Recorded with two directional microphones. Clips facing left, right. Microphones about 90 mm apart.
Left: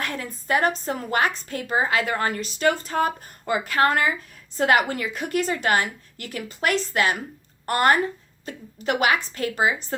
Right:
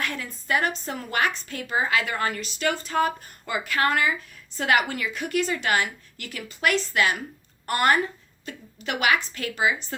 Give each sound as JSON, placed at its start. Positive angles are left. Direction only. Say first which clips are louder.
{"t": 0.0, "sound": "a woman's voice", "louder": "left 1 dB", "side_deg": 30}